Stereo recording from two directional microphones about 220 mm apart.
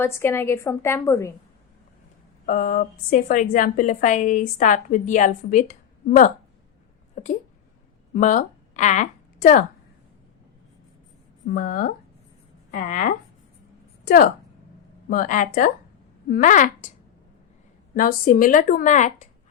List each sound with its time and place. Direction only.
0.0 s a woman's voice: 10° left (ahead or behind)
2.5 s a woman's voice: 40° left (ahead or behind)
7.2 s a sound: 30° left (ahead or behind)
8.1 s a woman's voice: 35° left (ahead or behind)
11.4 s a woman's voice: 45° left (ahead or behind)
15.1 s a woman's voice: 40° left (ahead or behind)
17.9 s a woman's voice: 40° left (ahead or behind)